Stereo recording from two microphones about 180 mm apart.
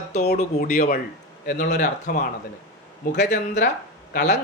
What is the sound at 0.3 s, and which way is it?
Speech, 55° left (ahead or behind).